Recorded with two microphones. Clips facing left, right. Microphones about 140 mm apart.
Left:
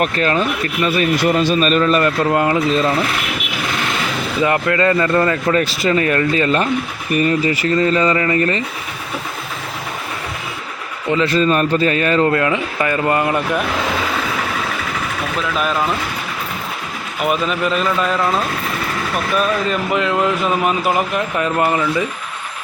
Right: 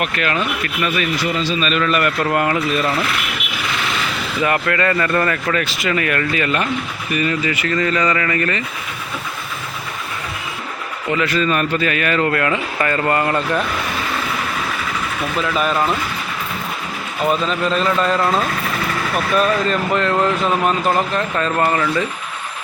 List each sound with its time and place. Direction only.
0.0 s speech: 35° left (ahead or behind)
1.2 s a man's voice: 55° left (ahead or behind)
1.8 s a man's voice: 30° left (ahead or behind)
4.4 s a man's voice: 20° left (ahead or behind)
11.1 s a man's voice: 30° left (ahead or behind); by 13.6 s 15° left (ahead or behind)
15.4 s speech: centre (ahead or behind)
17.2 s speech: 10° left (ahead or behind)
19.4 s speech: 5° left (ahead or behind)